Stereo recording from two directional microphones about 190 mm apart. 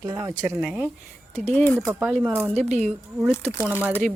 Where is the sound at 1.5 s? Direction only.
10° left (ahead or behind).